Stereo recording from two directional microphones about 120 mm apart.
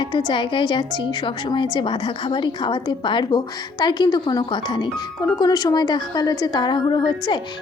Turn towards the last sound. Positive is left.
turn(degrees=40)  # may be behind; listen again after turning